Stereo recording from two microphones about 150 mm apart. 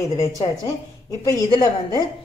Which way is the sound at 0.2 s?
25° left (ahead or behind).